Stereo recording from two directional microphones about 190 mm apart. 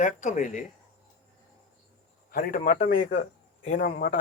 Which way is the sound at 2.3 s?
50° left (ahead or behind).